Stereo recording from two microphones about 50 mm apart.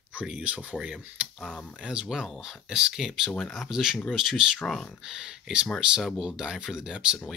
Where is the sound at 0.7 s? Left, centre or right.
Centre.